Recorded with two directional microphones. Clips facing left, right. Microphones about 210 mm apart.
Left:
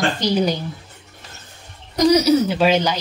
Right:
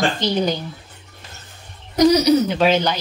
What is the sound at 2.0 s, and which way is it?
Speech, 5° left (ahead or behind).